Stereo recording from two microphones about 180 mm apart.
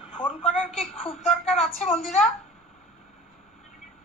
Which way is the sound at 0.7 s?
35° left (ahead or behind).